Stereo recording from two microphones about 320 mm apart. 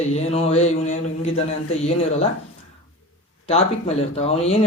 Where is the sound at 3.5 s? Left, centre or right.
Centre.